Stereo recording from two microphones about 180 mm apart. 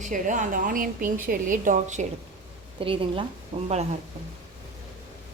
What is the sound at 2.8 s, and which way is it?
A woman's voice, 30° right (ahead or behind).